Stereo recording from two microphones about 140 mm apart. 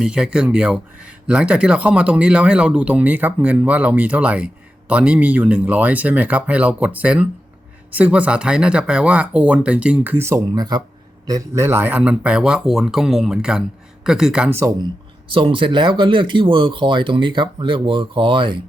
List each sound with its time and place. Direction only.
0.0 s speech: 5° right (ahead or behind)
15.3 s speech: 40° right (ahead or behind)